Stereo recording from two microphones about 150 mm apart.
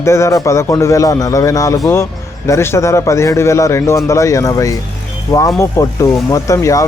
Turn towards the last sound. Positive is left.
turn(degrees=20)  # may be behind; listen again after turning